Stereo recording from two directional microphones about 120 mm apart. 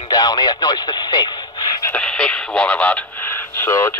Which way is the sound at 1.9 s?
10° left (ahead or behind).